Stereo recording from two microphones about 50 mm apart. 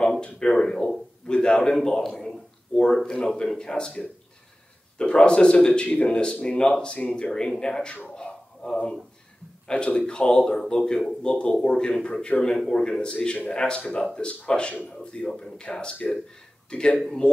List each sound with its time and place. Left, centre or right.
0.0 s a sound: centre
1.8 s a man's voice: centre
9.7 s speech: centre
15.0 s speech: centre
15.4 s speech: centre